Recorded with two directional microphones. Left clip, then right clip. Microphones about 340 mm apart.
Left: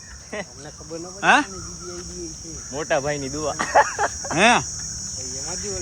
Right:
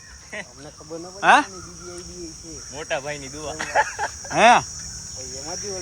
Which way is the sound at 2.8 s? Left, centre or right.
Left.